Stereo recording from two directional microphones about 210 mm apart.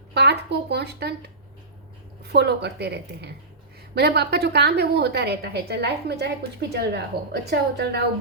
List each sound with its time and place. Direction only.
0.1 s a woman's voice: 55° right (ahead or behind)